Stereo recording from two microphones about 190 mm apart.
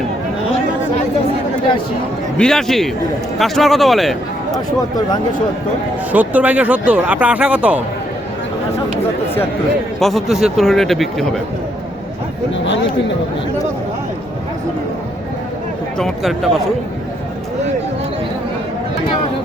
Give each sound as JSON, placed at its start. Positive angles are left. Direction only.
{"t": 2.4, "sound": "speech", "side_deg": 5}
{"t": 6.1, "sound": "speech", "side_deg": -10}
{"t": 10.0, "sound": "speech", "side_deg": 0}
{"t": 12.6, "sound": "speech", "side_deg": 70}
{"t": 16.0, "sound": "speech", "side_deg": 0}